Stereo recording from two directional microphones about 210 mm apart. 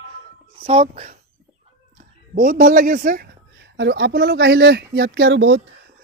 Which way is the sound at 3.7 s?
55° right (ahead or behind).